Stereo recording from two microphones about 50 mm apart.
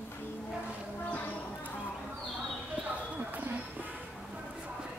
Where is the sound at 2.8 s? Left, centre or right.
Right.